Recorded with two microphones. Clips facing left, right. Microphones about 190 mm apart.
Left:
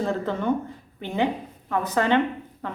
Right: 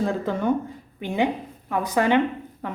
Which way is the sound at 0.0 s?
10° right (ahead or behind).